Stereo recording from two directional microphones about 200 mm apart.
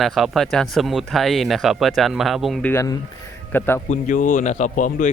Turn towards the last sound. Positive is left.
turn(degrees=40)  # may be behind; listen again after turning